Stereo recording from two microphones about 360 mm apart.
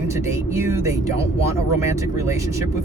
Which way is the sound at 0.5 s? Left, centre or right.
Centre.